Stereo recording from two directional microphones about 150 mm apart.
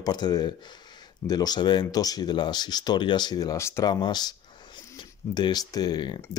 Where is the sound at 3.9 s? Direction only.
30° left (ahead or behind).